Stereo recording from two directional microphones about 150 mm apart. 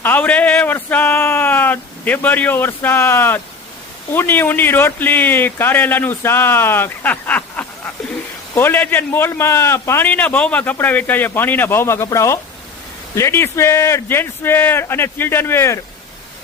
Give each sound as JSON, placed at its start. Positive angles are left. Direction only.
{"t": 0.0, "sound": "a man's voice", "side_deg": 10}